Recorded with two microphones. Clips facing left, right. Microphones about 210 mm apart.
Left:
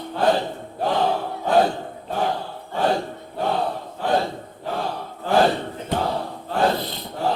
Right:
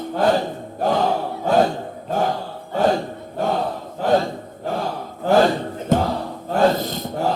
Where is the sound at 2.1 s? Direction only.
45° right (ahead or behind).